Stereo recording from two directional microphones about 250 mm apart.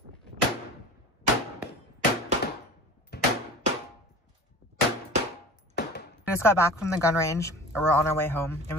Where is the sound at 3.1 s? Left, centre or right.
Left.